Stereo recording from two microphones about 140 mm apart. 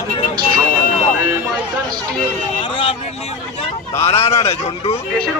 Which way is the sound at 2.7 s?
40° left (ahead or behind).